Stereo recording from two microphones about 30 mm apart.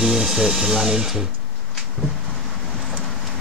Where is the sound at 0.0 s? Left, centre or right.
Centre.